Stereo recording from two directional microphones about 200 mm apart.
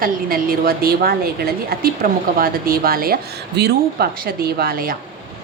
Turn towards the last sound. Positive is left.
turn(degrees=-50)  # may be behind; listen again after turning